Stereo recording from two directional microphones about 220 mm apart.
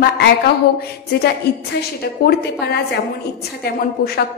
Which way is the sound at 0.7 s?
45° left (ahead or behind).